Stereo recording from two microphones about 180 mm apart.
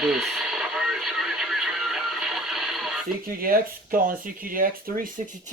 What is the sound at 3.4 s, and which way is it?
Speech, 50° right (ahead or behind).